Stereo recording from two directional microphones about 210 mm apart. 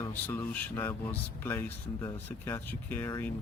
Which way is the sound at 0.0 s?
10° left (ahead or behind).